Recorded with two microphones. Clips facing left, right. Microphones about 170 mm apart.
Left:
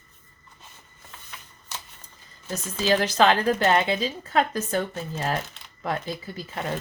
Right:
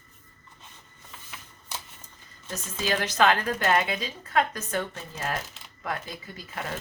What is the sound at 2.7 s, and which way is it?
A woman's voice, 30° left (ahead or behind).